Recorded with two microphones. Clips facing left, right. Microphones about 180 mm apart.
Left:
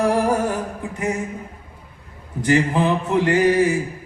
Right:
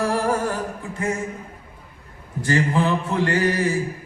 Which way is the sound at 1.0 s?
20° left (ahead or behind).